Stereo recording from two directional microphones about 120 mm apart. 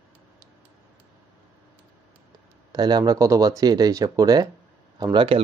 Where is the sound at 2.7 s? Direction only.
35° right (ahead or behind).